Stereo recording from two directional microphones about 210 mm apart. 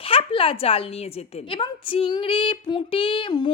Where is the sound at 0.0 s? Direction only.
25° left (ahead or behind).